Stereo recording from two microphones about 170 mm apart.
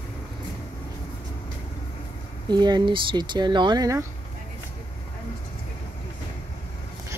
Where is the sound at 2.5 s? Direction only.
25° right (ahead or behind).